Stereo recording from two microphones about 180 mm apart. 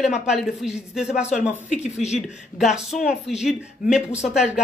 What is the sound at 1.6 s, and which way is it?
Speech, 40° left (ahead or behind).